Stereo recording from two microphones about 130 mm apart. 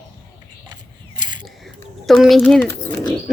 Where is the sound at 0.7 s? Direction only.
35° right (ahead or behind).